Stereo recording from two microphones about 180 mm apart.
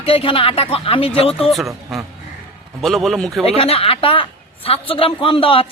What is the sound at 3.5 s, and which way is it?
A woman's voice, 35° left (ahead or behind).